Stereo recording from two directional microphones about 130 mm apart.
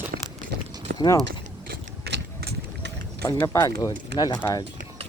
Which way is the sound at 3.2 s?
25° left (ahead or behind).